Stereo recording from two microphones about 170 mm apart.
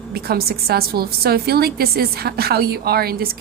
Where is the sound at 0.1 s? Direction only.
65° right (ahead or behind).